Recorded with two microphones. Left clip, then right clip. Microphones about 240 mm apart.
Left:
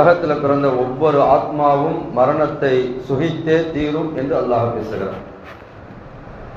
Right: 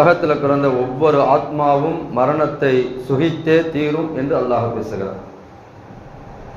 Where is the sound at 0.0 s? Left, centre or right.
Right.